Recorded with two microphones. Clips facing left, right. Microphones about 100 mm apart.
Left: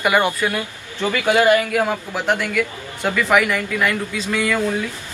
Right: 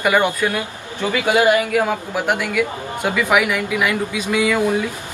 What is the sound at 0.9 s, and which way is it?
Speech, 15° right (ahead or behind).